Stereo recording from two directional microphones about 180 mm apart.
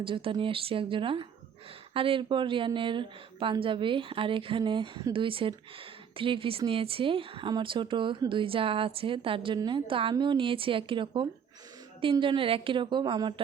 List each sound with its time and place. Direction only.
0.0 s speech: 30° right (ahead or behind)